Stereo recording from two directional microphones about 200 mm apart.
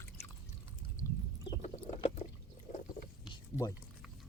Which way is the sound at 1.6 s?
35° left (ahead or behind).